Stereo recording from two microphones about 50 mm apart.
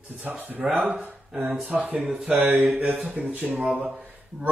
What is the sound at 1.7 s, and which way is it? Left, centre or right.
Speech, right.